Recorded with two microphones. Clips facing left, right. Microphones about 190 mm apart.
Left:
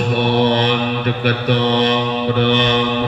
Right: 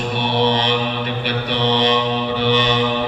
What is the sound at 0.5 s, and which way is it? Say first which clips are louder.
Mantra: left 3 dB; 55° left (ahead or behind).